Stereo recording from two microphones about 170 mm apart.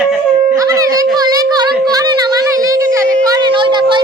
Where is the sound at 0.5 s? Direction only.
20° right (ahead or behind).